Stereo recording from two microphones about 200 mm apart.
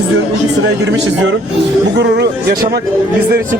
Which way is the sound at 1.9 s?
55° right (ahead or behind).